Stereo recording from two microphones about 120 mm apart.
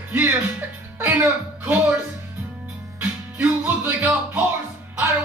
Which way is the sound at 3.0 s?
10° right (ahead or behind).